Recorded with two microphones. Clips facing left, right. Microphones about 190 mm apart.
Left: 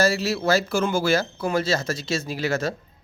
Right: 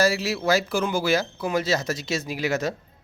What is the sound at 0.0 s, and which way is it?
Speech, 10° right (ahead or behind).